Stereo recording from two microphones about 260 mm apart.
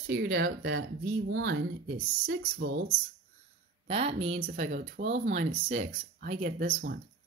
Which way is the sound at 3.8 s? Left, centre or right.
Right.